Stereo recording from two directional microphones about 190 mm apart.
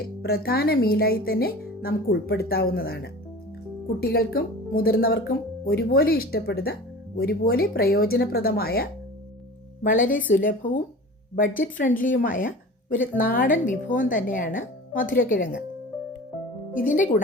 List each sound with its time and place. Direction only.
0.2 s speech: 55° left (ahead or behind)
9.8 s speech: 45° left (ahead or behind)
16.8 s speech: 45° left (ahead or behind)